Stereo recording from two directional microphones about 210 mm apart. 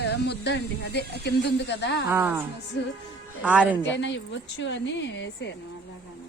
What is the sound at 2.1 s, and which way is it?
A woman's voice, 10° right (ahead or behind).